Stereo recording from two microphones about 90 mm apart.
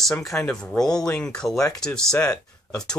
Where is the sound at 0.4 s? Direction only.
10° left (ahead or behind).